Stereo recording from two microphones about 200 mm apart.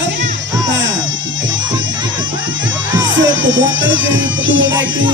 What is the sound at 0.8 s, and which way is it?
Music, 70° right (ahead or behind).